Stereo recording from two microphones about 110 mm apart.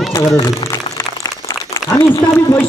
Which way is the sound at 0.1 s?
35° left (ahead or behind).